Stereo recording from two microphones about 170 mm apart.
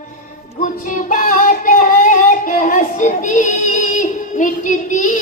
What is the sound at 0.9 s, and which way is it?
Child singing, 55° left (ahead or behind).